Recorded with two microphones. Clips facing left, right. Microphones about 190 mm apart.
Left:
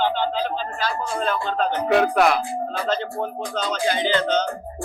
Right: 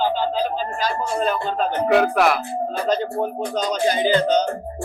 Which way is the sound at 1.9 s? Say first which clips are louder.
Right 1 dB; centre (ahead or behind).